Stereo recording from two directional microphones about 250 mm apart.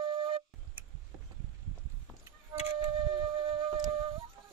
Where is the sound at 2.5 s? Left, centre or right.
Centre.